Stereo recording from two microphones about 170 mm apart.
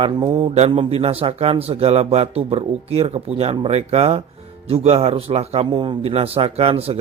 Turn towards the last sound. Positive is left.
turn(degrees=-35)  # may be behind; listen again after turning